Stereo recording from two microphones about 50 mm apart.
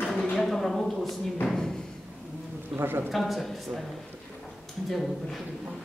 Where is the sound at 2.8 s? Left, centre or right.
Right.